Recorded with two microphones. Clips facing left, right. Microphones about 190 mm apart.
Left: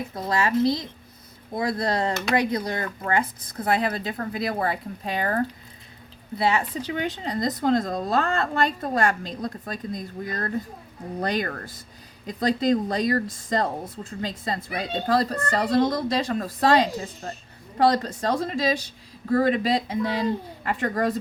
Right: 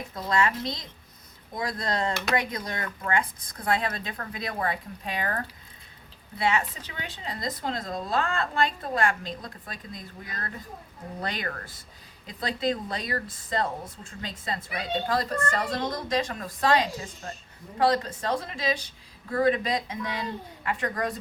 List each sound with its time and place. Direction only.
0.1 s a woman's voice: 30° left (ahead or behind)
6.4 s a woman's voice: 35° left (ahead or behind)